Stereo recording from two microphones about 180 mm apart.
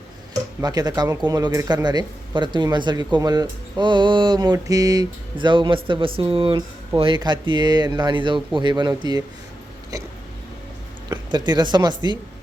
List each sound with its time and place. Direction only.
0.6 s speech: 20° right (ahead or behind)
11.1 s speech: 25° right (ahead or behind)